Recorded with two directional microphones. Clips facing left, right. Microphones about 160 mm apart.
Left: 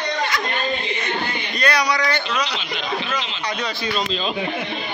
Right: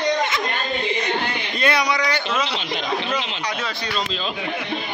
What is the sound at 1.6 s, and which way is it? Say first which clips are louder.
Speech: even; 20° right (ahead or behind).